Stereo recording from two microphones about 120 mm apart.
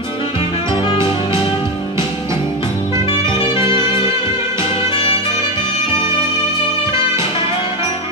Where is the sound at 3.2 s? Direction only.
25° right (ahead or behind).